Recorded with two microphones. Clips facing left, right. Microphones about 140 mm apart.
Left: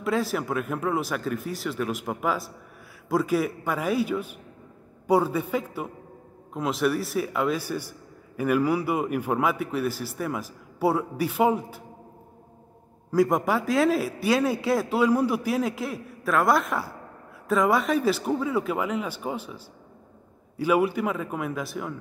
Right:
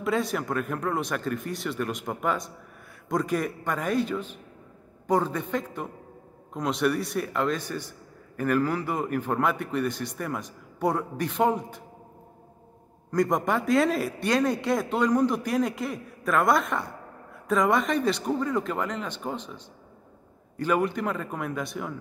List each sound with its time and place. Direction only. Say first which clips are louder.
0.0 s a man's voice: left 1 dB; centre (ahead or behind)
13.1 s a man's voice: left 2 dB; 5° left (ahead or behind)